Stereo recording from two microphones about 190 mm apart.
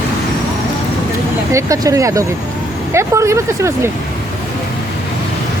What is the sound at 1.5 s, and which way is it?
Speech, 15° right (ahead or behind).